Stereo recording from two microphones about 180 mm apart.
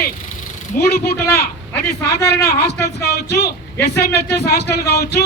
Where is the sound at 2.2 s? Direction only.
65° left (ahead or behind).